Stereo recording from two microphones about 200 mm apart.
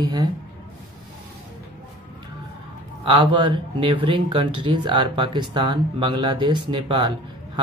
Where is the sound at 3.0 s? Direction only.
25° right (ahead or behind).